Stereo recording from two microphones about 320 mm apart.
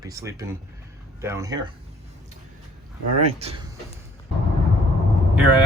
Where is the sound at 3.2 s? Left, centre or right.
Centre.